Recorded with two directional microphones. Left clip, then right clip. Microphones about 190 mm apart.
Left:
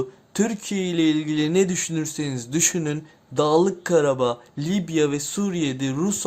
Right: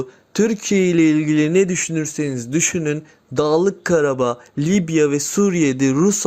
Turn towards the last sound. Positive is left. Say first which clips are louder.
# right 9 dB
turn(degrees=-20)  # may be behind; listen again after turning